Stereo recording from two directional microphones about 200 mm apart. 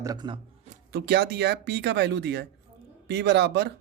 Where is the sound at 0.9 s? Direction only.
55° right (ahead or behind).